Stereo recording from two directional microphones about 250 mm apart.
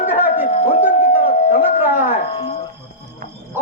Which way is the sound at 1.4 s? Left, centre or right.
Left.